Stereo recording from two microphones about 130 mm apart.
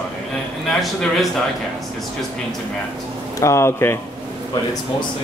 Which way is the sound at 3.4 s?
20° left (ahead or behind).